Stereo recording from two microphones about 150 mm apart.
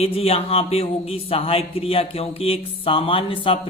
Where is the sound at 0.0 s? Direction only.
40° left (ahead or behind).